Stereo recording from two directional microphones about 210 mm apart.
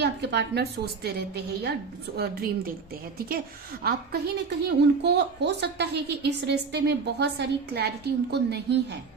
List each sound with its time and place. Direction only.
0.0 s a woman's voice: 55° right (ahead or behind)
3.8 s a woman's voice: 50° right (ahead or behind)